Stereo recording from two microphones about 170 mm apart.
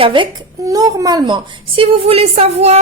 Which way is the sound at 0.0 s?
30° right (ahead or behind).